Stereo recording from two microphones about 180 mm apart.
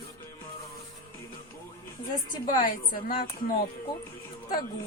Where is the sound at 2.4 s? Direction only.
50° left (ahead or behind).